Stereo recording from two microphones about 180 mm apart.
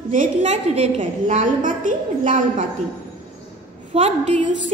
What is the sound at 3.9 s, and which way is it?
Speech, 35° right (ahead or behind).